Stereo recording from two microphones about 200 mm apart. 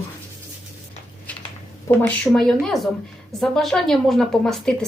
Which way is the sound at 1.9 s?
10° left (ahead or behind).